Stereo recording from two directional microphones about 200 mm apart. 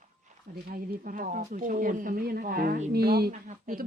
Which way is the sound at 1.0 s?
40° right (ahead or behind).